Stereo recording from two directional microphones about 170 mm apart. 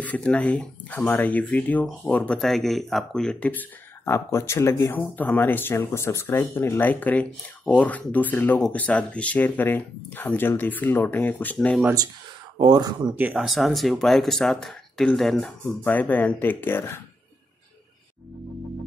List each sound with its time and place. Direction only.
0.0 s speech: 5° left (ahead or behind)
12.5 s speech: 25° right (ahead or behind)
13.1 s speech: 5° right (ahead or behind); by 17.0 s 15° left (ahead or behind)